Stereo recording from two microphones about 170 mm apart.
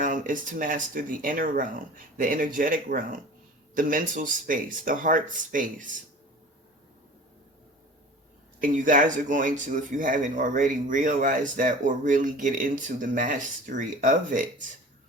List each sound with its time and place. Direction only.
0.0 s speech: 50° right (ahead or behind)
8.6 s speech: 50° right (ahead or behind)